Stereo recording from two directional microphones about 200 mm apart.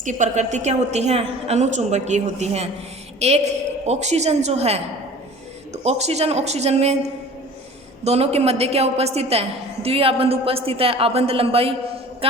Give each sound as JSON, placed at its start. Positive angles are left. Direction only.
{"t": 0.0, "sound": "a woman's voice", "side_deg": -40}